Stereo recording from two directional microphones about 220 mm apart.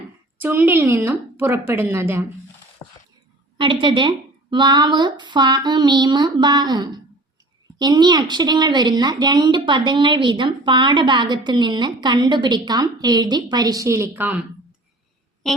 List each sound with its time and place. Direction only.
0.3 s a woman's voice: 10° right (ahead or behind)
3.6 s a woman's voice: 20° right (ahead or behind)